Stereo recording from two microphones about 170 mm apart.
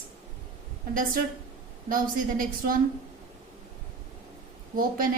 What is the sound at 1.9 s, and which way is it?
Speech, 55° right (ahead or behind).